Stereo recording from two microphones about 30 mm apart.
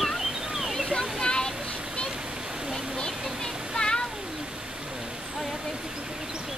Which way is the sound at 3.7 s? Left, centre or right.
Left.